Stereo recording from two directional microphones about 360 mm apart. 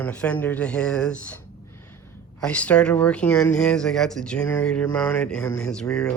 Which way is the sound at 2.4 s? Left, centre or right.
Centre.